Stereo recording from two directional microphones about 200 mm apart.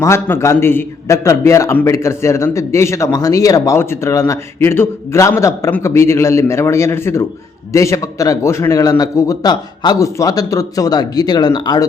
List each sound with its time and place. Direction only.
0.0 s a man's voice: 15° left (ahead or behind)